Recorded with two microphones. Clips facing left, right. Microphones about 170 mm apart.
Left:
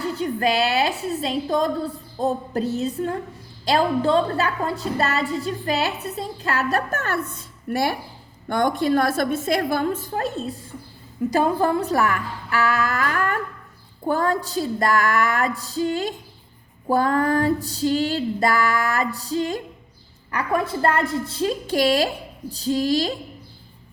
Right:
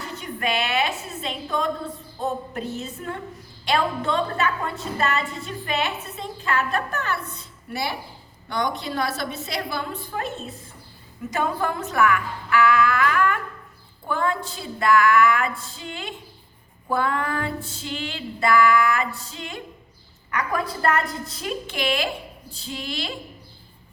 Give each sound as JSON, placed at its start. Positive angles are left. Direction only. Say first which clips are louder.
{"t": 0.0, "sound": "a woman's voice", "louder": "left 7 dB", "side_deg": 35}